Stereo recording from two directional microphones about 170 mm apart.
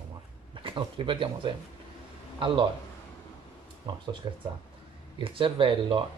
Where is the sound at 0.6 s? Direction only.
30° right (ahead or behind).